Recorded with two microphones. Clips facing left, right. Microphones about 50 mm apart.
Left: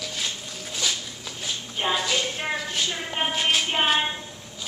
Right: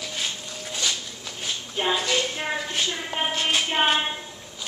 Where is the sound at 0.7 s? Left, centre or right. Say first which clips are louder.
Even; centre.